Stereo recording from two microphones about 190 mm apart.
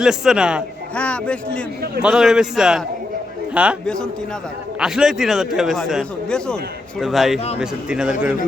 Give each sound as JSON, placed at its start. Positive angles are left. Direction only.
{"t": 0.0, "sound": "a man's voice", "side_deg": -5}
{"t": 0.9, "sound": "a man's voice", "side_deg": 5}
{"t": 7.3, "sound": "a man's voice", "side_deg": 35}
{"t": 7.6, "sound": "a man's voice", "side_deg": -5}